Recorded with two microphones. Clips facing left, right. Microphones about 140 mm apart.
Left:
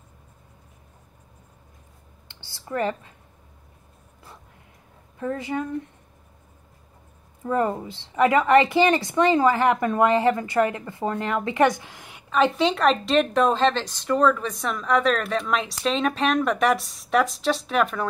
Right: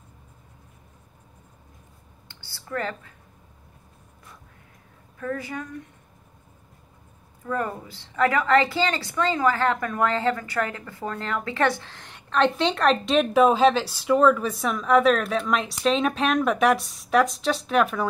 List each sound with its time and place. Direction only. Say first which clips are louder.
2.4 s speech: left 4 dB; 20° left (ahead or behind)
5.2 s speech: left 4 dB; 25° left (ahead or behind)
7.4 s a woman's voice: left 5 dB; 25° left (ahead or behind); by 18.0 s centre (ahead or behind)